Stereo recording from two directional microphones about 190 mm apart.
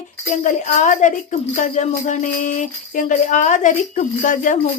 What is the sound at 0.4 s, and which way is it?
A woman's voice, 40° left (ahead or behind).